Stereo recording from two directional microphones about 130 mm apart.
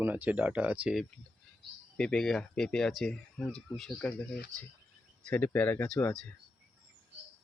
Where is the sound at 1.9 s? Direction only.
5° left (ahead or behind).